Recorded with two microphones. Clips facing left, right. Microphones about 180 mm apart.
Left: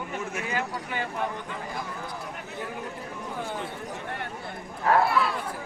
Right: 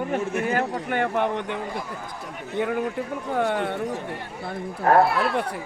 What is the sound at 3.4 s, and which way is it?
Speech, 70° right (ahead or behind).